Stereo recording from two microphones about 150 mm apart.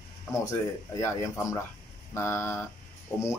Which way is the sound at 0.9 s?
20° left (ahead or behind).